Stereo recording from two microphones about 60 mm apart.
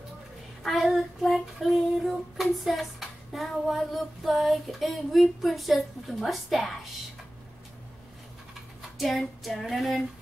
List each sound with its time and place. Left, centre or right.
0.6 s a sound: centre
0.9 s female singing: centre
8.9 s female singing: centre